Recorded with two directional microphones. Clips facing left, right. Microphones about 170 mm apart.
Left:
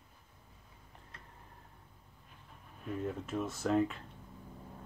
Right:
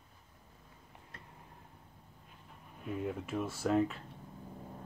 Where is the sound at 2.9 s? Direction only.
10° right (ahead or behind).